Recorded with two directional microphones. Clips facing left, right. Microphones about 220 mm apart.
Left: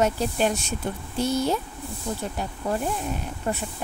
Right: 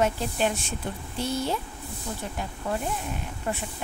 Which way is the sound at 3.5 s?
35° left (ahead or behind).